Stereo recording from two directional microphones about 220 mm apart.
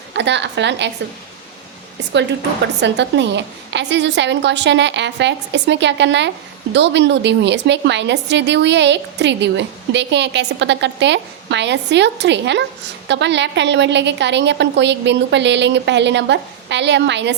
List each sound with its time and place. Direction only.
0.1 s a woman's voice: 55° right (ahead or behind)
2.8 s a woman's voice: 55° right (ahead or behind)